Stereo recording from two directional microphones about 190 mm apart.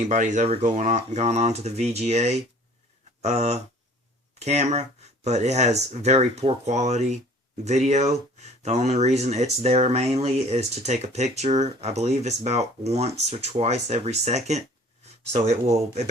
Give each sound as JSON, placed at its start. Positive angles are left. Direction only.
{"t": 0.0, "sound": "speech", "side_deg": -40}